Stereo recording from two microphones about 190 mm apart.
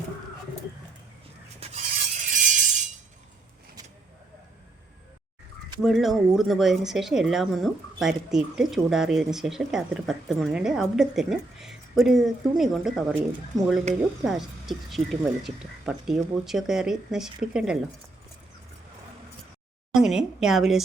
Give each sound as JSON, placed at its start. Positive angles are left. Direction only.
{"t": 1.5, "sound": "a sound", "side_deg": -35}
{"t": 5.8, "sound": "speech", "side_deg": 0}
{"t": 19.9, "sound": "speech", "side_deg": -5}